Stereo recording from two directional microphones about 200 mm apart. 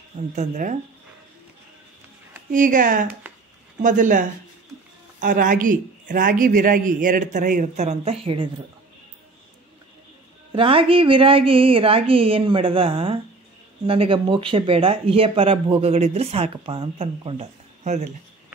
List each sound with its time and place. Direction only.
0.4 s a man's voice: 40° right (ahead or behind)
2.5 s a man's voice: 40° right (ahead or behind)
10.5 s speech: 25° right (ahead or behind)